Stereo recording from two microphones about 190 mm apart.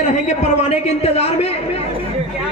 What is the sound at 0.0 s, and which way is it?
A man's voice, 35° left (ahead or behind).